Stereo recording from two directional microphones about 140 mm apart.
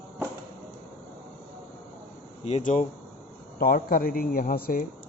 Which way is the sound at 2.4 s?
55° left (ahead or behind).